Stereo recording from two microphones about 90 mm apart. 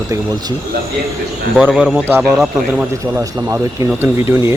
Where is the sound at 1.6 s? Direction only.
Centre (ahead or behind).